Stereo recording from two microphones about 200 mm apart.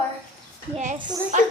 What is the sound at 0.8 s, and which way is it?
Speech, 35° right (ahead or behind).